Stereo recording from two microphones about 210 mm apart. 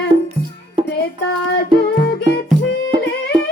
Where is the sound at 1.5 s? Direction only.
50° left (ahead or behind).